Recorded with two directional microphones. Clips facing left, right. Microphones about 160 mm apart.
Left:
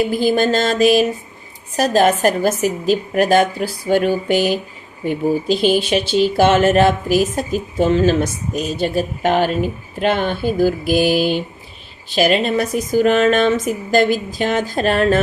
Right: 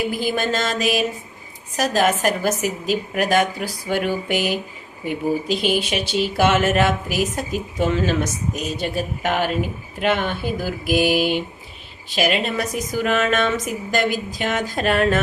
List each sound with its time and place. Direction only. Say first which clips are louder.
0.2 s speech: left 6 dB; 30° left (ahead or behind)